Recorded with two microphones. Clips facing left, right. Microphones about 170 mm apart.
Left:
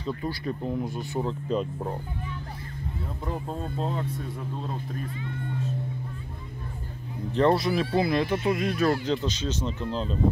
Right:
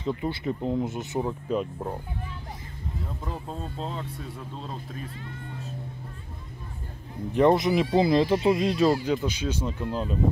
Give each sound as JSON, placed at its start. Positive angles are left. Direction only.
{"t": 0.0, "sound": "speech", "side_deg": -20}
{"t": 1.2, "sound": "speech", "side_deg": -5}
{"t": 3.3, "sound": "speech", "side_deg": 5}
{"t": 7.3, "sound": "speech", "side_deg": -15}
{"t": 8.9, "sound": "speech", "side_deg": -10}